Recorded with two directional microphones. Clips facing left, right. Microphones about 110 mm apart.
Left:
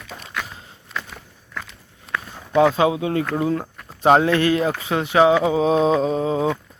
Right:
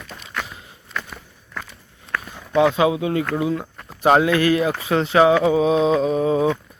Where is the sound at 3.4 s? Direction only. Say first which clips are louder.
Left 1 dB; 45° left (ahead or behind).